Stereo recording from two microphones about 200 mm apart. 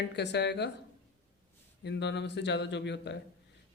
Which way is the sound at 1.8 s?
60° left (ahead or behind).